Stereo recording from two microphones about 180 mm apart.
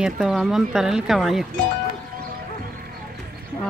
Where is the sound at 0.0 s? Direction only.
Centre (ahead or behind).